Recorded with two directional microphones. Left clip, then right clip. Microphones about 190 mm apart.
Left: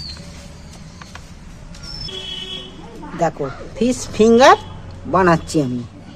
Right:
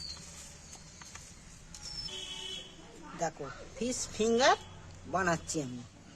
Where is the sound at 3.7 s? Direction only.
25° left (ahead or behind).